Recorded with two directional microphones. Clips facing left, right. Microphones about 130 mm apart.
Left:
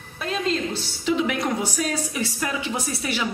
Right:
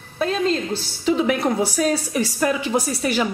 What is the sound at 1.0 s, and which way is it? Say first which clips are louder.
Speech: right 4 dB; 35° right (ahead or behind).